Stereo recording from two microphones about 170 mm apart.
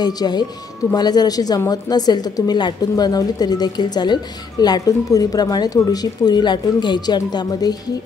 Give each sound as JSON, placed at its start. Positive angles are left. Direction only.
{"t": 0.0, "sound": "a woman's voice", "side_deg": 25}